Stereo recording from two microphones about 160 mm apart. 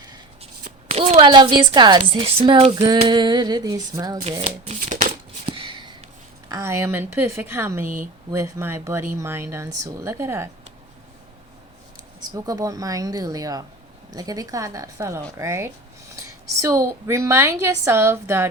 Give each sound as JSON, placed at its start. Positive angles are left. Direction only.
{"t": 0.6, "sound": "speech", "side_deg": -40}
{"t": 4.2, "sound": "speech", "side_deg": -35}
{"t": 4.6, "sound": "shuffling cards", "side_deg": -45}
{"t": 5.5, "sound": "a sound", "side_deg": -35}
{"t": 6.5, "sound": "a woman's voice", "side_deg": -15}
{"t": 12.2, "sound": "a woman's voice", "side_deg": -25}